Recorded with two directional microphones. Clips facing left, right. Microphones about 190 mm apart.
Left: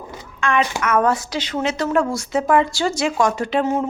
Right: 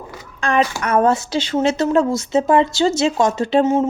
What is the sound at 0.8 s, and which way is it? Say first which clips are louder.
Speech: right 2 dB; 30° right (ahead or behind).